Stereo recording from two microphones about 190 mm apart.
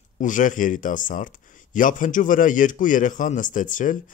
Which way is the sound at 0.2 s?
45° left (ahead or behind).